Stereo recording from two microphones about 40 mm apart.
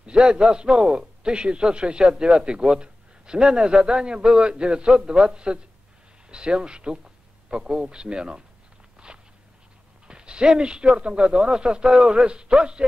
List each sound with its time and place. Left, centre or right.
0.0 s a man's voice: right
9.0 s walk: right
10.0 s a man's voice: right